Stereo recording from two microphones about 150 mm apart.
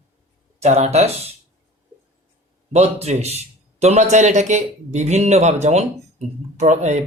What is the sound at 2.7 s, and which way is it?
A man's voice, 45° right (ahead or behind).